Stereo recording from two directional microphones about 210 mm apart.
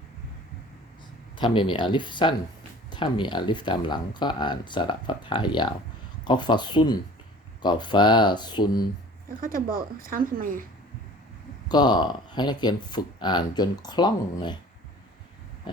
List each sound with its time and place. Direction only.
1.4 s speech: 25° left (ahead or behind)
9.4 s speech: 40° right (ahead or behind)
11.7 s speech: 20° left (ahead or behind)